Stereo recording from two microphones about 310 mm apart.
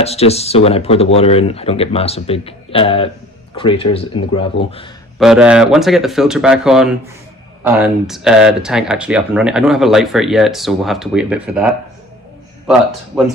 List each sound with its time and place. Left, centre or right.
0.0 s speech: centre
5.2 s speech: centre
13.1 s speech: centre